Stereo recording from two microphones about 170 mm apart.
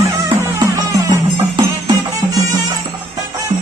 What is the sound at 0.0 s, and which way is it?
Music, 15° right (ahead or behind).